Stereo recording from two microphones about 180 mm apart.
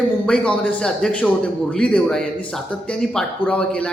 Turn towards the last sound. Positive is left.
turn(degrees=5)  # may be behind; listen again after turning